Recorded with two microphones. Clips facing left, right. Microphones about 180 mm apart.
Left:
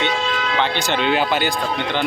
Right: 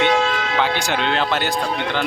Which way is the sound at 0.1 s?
55° right (ahead or behind).